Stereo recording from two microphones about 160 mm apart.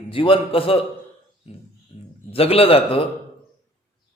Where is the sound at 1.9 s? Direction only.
30° left (ahead or behind).